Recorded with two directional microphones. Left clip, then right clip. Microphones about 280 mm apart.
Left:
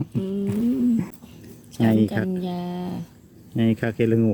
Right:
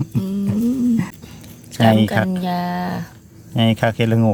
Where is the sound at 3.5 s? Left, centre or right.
Right.